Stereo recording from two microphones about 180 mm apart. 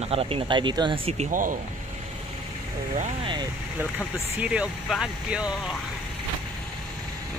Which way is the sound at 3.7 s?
10° right (ahead or behind).